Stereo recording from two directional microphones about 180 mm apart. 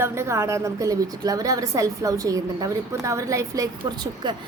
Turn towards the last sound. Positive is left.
turn(degrees=-25)  # may be behind; listen again after turning